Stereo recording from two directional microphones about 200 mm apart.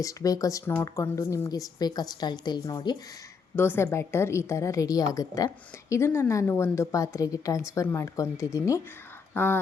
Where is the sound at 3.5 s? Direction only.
10° left (ahead or behind).